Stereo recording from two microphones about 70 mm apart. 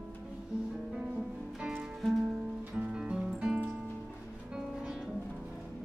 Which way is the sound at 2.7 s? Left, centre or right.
Centre.